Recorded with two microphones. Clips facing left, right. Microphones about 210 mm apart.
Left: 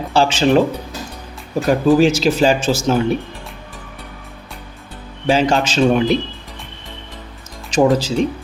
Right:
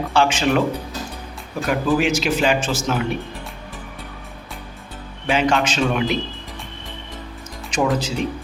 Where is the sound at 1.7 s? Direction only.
35° left (ahead or behind).